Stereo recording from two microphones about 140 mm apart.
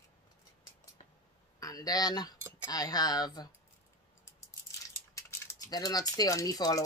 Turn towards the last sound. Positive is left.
turn(degrees=25)  # may be behind; listen again after turning